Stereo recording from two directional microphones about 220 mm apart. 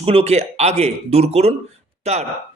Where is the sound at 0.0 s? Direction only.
25° right (ahead or behind).